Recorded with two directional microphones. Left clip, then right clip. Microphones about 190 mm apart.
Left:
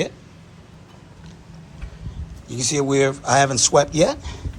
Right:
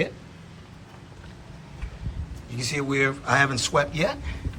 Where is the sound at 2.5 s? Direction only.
20° left (ahead or behind).